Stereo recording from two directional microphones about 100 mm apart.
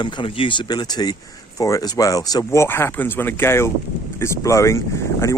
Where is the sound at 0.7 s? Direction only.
40° left (ahead or behind).